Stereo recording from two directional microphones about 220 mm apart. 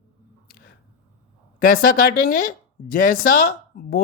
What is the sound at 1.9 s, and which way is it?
Speech, 40° left (ahead or behind).